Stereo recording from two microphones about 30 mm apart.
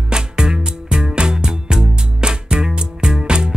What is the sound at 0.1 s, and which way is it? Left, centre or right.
Music, right.